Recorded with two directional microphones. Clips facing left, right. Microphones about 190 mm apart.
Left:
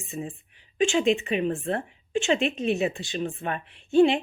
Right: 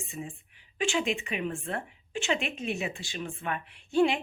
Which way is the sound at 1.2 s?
30° left (ahead or behind).